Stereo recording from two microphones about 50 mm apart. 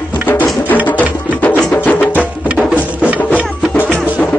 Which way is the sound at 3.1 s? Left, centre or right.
Right.